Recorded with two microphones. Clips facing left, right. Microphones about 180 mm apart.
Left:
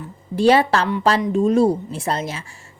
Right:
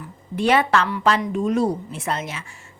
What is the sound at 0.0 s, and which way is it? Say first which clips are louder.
A woman's voice: left 6 dB; 35° left (ahead or behind).